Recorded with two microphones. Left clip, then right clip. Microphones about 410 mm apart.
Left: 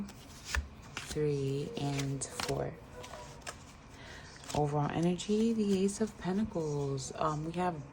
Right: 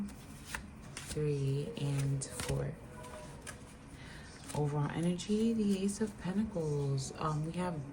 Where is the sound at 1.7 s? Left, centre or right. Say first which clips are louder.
Left 3 dB; centre.